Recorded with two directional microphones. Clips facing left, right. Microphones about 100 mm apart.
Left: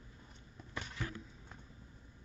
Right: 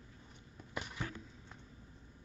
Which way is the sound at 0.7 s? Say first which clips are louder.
Right 2 dB; 15° right (ahead or behind).